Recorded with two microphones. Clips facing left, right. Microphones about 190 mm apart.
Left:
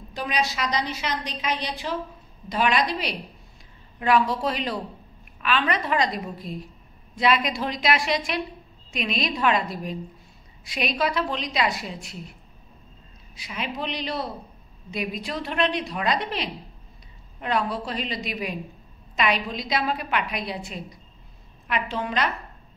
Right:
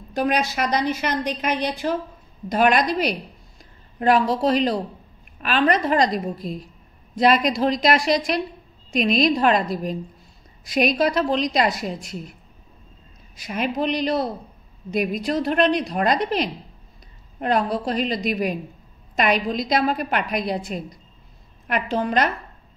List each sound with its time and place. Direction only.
0.1 s a woman's voice: 50° right (ahead or behind)
13.4 s a woman's voice: 45° right (ahead or behind)